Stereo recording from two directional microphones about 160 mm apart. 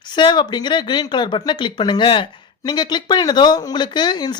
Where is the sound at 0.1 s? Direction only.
30° left (ahead or behind).